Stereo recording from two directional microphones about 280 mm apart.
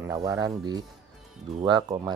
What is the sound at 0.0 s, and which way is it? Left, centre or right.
Speech, centre.